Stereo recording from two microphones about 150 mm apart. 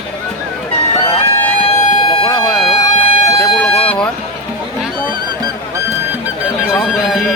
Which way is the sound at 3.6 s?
10° left (ahead or behind).